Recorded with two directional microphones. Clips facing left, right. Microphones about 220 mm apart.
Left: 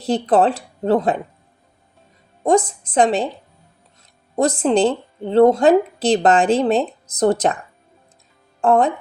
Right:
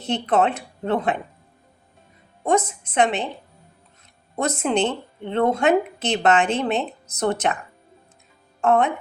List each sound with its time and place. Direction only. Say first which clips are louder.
0.0 s a woman's voice: left 4 dB; 35° left (ahead or behind)
2.4 s a woman's voice: left 5 dB; 35° left (ahead or behind)
4.4 s a woman's voice: left 5 dB; 35° left (ahead or behind)
8.6 s a woman's voice: left 3 dB; 35° left (ahead or behind)